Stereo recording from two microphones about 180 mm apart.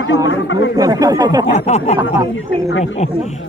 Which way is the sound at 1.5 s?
40° left (ahead or behind).